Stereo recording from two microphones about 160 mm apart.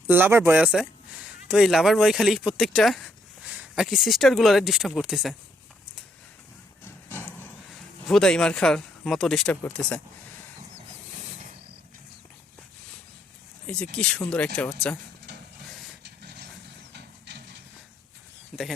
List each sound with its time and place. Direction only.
0.1 s speech: 15° right (ahead or behind)
6.8 s a sound: 15° left (ahead or behind)
7.7 s speech: centre (ahead or behind)
13.7 s speech: 5° left (ahead or behind)
16.0 s vehicle: 90° right
16.9 s a sound: 90° right
18.5 s speech: 5° right (ahead or behind)